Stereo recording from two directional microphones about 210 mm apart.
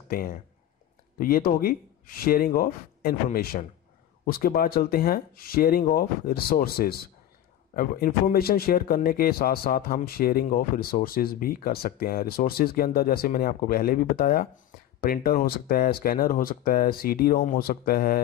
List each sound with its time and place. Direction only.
0.1 s a man's voice: 45° left (ahead or behind)